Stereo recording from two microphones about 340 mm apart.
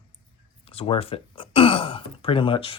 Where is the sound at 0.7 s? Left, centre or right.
Centre.